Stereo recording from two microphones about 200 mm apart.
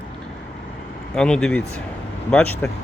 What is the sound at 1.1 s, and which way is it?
Speech, 5° left (ahead or behind).